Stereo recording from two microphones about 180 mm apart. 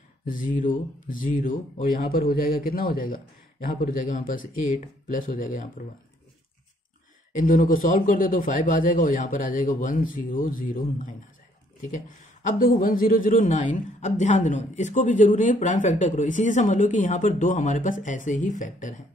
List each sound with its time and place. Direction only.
0.2 s speech: 50° left (ahead or behind)
7.3 s speech: 50° left (ahead or behind)